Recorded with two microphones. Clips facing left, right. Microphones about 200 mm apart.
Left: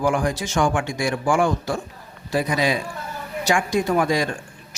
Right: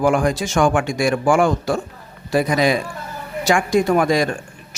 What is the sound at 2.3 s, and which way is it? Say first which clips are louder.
Speech: right 4 dB; 60° right (ahead or behind).